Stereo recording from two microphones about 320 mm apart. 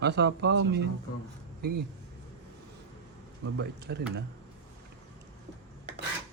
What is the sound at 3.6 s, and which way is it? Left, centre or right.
Speech, right.